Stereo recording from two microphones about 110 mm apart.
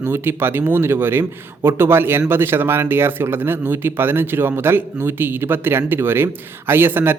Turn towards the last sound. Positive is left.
turn(degrees=-20)  # may be behind; listen again after turning